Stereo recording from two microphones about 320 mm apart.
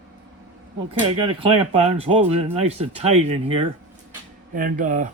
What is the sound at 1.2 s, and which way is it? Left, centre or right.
Speech, centre.